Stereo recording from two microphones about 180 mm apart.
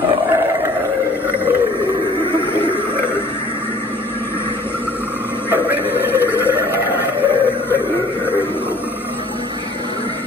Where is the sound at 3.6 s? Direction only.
10° left (ahead or behind).